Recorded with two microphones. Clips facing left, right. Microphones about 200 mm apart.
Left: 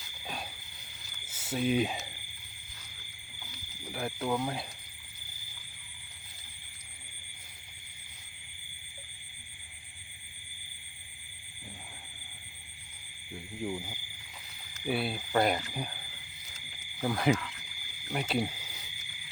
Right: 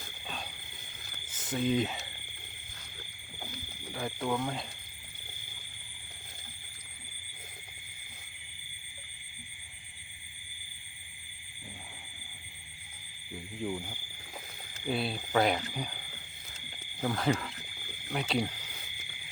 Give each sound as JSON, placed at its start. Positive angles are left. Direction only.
{"t": 1.3, "sound": "speech", "side_deg": 10}
{"t": 3.9, "sound": "speech", "side_deg": 5}
{"t": 13.7, "sound": "a sound", "side_deg": 10}
{"t": 14.8, "sound": "speech", "side_deg": 5}
{"t": 17.0, "sound": "speech", "side_deg": 10}
{"t": 17.3, "sound": "cricket", "side_deg": -35}
{"t": 18.1, "sound": "speech", "side_deg": 5}